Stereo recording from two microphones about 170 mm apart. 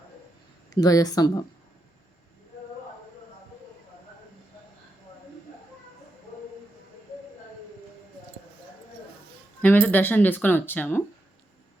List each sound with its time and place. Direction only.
0.7 s speech: 20° left (ahead or behind)
9.6 s speech: 10° left (ahead or behind)